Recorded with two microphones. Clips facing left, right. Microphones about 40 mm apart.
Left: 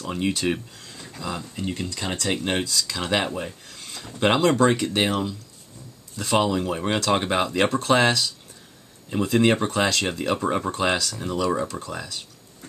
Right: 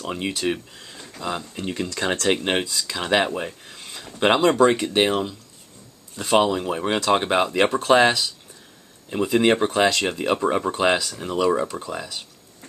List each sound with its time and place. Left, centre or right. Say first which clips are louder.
0.1 s speech: left 1 dB; centre
1.6 s speech: right 3 dB; right
2.3 s speech: right 1 dB; right